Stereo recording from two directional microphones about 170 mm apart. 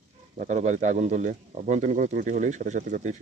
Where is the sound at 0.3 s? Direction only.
45° right (ahead or behind).